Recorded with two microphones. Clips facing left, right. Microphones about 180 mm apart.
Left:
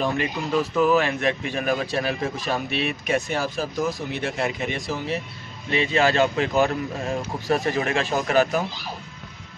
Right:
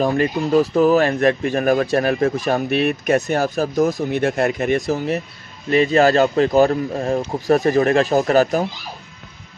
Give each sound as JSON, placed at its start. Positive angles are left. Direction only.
{"t": 0.0, "sound": "speech", "side_deg": -40}